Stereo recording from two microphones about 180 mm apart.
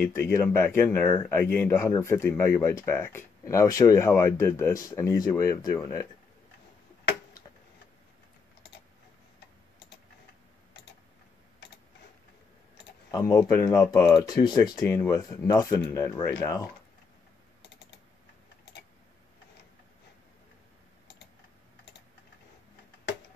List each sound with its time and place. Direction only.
0.0 s speech: 15° left (ahead or behind)
13.1 s speech: 20° left (ahead or behind)